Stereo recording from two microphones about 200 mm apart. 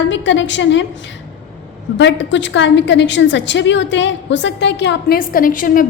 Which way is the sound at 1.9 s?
65° left (ahead or behind).